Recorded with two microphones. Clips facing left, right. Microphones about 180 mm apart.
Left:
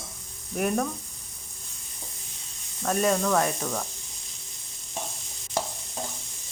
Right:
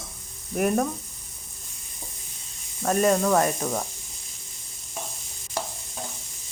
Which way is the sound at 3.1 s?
20° right (ahead or behind).